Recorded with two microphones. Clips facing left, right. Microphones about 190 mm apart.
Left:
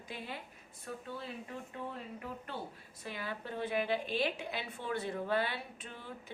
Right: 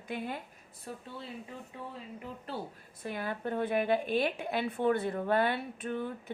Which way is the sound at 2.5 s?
35° right (ahead or behind).